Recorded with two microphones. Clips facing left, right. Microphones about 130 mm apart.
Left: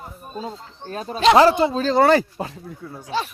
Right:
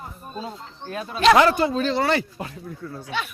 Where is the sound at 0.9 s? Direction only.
35° left (ahead or behind).